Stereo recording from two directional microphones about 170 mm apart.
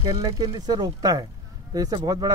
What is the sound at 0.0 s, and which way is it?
Speech, 25° right (ahead or behind).